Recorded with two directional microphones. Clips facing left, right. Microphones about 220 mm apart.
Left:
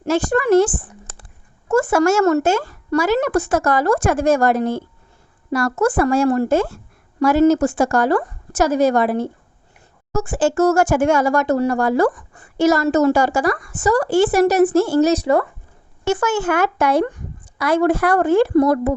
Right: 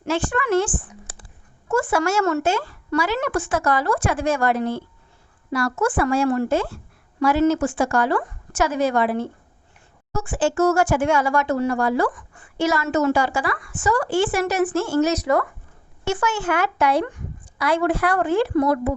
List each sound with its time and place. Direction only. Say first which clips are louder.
0.0 s speech: left 6 dB; 40° left (ahead or behind)
16.0 s speech: left 4 dB; 45° left (ahead or behind)